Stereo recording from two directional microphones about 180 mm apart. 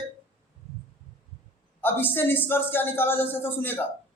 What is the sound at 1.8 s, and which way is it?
A man's voice, 10° left (ahead or behind).